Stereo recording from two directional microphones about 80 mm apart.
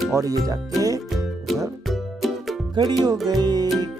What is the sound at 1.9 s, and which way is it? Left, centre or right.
Music, centre.